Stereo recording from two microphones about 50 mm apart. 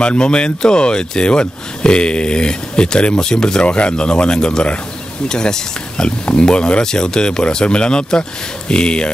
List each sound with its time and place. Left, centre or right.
0.0 s speech: centre